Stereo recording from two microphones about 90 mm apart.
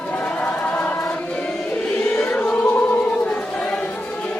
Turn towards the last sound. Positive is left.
turn(degrees=15)  # may be behind; listen again after turning